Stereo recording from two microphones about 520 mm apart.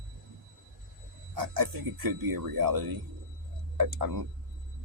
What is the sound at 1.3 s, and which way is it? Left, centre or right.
Speech, right.